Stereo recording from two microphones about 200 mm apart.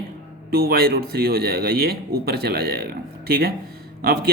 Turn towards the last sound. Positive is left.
turn(degrees=-50)  # may be behind; listen again after turning